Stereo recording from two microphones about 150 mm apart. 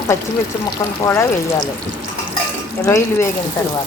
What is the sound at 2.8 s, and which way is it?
Speech, 20° left (ahead or behind).